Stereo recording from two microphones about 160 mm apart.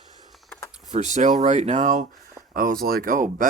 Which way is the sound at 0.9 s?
45° right (ahead or behind).